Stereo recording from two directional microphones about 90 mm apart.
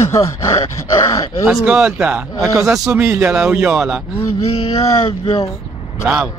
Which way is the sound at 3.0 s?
25° right (ahead or behind).